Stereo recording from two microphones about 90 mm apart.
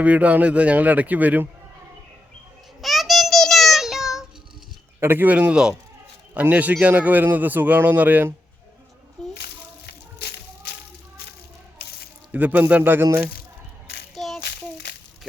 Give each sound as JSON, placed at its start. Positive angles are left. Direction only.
{"t": 0.0, "sound": "a man's voice", "side_deg": -15}
{"t": 2.8, "sound": "child singing", "side_deg": 0}
{"t": 4.9, "sound": "a man's voice", "side_deg": -25}
{"t": 9.2, "sound": "a sound", "side_deg": 5}
{"t": 12.3, "sound": "a man's voice", "side_deg": -15}
{"t": 14.2, "sound": "child singing", "side_deg": 0}